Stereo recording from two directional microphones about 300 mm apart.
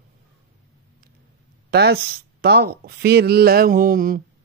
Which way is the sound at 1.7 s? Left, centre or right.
Right.